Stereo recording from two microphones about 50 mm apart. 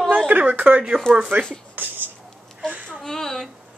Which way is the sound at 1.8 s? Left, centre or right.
Right.